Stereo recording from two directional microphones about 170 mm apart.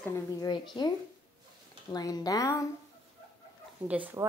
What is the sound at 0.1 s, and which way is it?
Speech, 20° left (ahead or behind).